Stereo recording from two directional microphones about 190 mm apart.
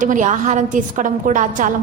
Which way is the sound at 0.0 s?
40° right (ahead or behind).